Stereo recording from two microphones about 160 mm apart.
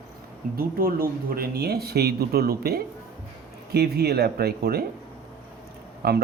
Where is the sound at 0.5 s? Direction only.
65° right (ahead or behind).